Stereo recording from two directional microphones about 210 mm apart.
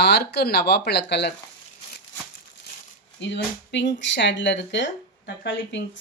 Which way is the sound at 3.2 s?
55° left (ahead or behind).